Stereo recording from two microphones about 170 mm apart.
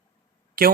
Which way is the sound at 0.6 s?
65° right (ahead or behind).